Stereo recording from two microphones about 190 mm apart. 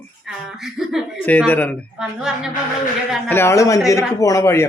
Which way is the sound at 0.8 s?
Centre (ahead or behind).